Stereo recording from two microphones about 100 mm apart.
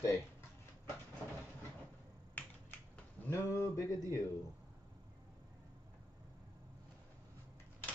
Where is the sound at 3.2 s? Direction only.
15° left (ahead or behind).